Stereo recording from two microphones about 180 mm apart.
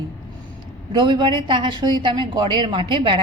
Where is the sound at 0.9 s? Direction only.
25° right (ahead or behind).